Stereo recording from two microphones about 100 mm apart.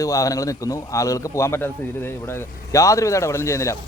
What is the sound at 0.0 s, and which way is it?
A man's voice, 35° left (ahead or behind).